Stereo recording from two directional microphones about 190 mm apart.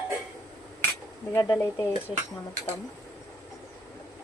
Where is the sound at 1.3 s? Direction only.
20° left (ahead or behind).